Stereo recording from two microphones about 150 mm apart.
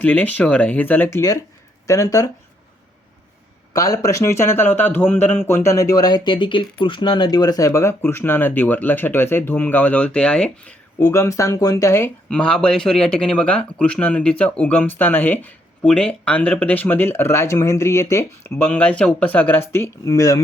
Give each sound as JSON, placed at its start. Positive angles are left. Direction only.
{"t": 0.0, "sound": "a man's voice", "side_deg": 10}
{"t": 3.7, "sound": "a man's voice", "side_deg": 25}
{"t": 11.0, "sound": "speech", "side_deg": 20}
{"t": 12.3, "sound": "a man's voice", "side_deg": 5}